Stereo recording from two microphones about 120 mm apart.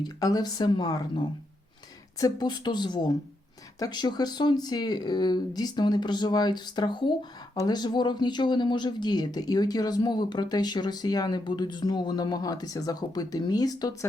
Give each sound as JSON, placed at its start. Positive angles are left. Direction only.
{"t": 0.0, "sound": "speech", "side_deg": 30}
{"t": 2.1, "sound": "speech", "side_deg": 35}